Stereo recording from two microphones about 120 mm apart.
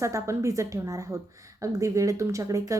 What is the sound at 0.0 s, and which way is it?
Speech, 25° right (ahead or behind).